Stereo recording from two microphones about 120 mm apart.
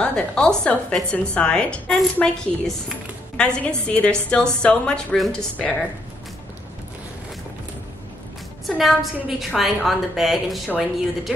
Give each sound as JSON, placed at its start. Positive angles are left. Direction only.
{"t": 0.0, "sound": "a woman's voice", "side_deg": 5}
{"t": 8.6, "sound": "a woman's voice", "side_deg": 0}